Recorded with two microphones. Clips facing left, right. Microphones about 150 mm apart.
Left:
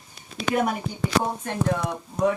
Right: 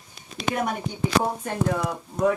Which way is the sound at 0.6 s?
Centre (ahead or behind).